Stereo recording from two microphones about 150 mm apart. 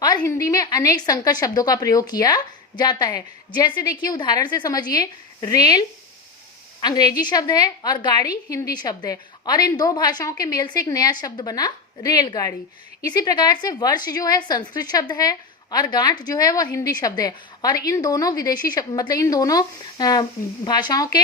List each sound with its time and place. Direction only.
0.0 s a woman's voice: 25° left (ahead or behind)
6.8 s a woman's voice: 25° left (ahead or behind)